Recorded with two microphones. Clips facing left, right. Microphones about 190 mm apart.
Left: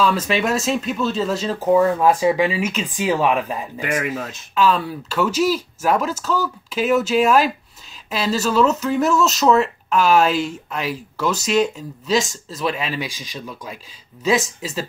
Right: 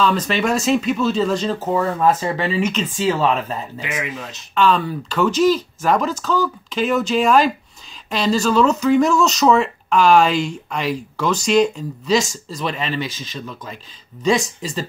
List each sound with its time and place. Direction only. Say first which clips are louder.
0.0 s speech: even; 5° left (ahead or behind)
3.8 s speech: left 4 dB; 50° left (ahead or behind)
4.6 s speech: right 1 dB; 5° left (ahead or behind)